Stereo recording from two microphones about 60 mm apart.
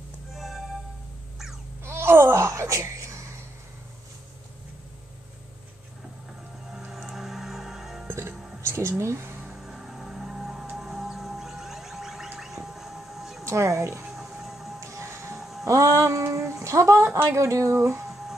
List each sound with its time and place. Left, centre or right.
0.4 s music: centre
1.9 s wail: right
3.0 s a sound: right
6.7 s music: centre
8.5 s a sound: right
9.5 s music: centre
12.4 s a sound: centre
13.5 s music: right
14.0 s music: centre
14.8 s music: right
16.3 s speech: right